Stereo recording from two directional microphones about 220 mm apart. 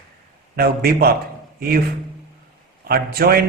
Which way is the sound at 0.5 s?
45° right (ahead or behind).